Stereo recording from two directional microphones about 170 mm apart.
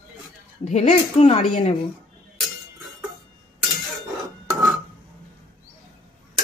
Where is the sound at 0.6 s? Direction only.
40° left (ahead or behind).